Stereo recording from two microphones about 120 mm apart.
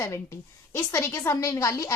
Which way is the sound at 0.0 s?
25° left (ahead or behind).